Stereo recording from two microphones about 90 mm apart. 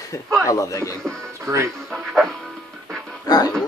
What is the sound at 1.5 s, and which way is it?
Speech, 35° right (ahead or behind).